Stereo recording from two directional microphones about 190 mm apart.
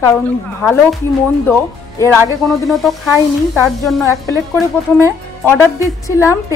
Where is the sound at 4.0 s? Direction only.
15° left (ahead or behind).